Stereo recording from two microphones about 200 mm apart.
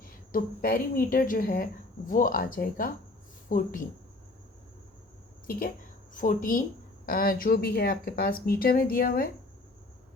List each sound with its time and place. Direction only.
0.3 s speech: 45° left (ahead or behind)
5.5 s a woman's voice: 45° left (ahead or behind)